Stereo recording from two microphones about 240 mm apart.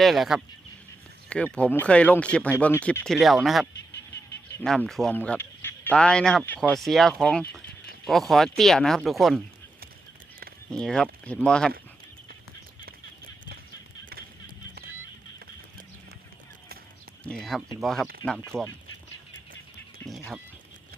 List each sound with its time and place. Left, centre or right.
0.0 s speech: centre
10.7 s speech: centre
14.1 s a sound: right
17.2 s speech: centre
20.0 s speech: centre